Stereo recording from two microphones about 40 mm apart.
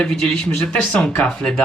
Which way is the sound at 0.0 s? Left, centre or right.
Left.